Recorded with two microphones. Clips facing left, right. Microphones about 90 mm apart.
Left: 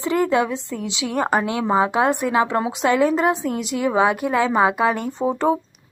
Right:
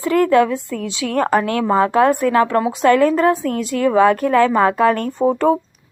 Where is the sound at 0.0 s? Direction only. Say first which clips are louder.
Right 5 dB; 20° left (ahead or behind).